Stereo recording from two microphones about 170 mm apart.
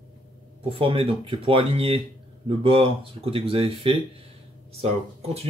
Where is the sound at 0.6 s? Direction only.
30° right (ahead or behind).